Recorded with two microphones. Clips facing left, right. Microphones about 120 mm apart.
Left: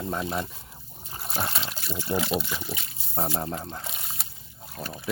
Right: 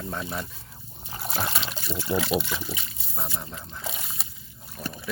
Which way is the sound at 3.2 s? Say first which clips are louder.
Left 7 dB; 35° left (ahead or behind).